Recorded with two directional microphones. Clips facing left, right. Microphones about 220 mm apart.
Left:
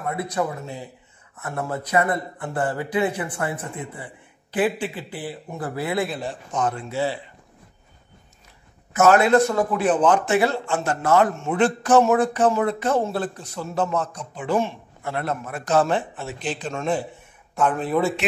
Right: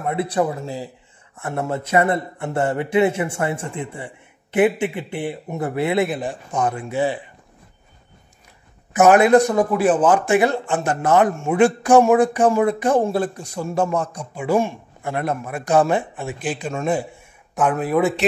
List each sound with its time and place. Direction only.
0.0 s speech: 30° right (ahead or behind)
8.9 s a man's voice: 15° right (ahead or behind)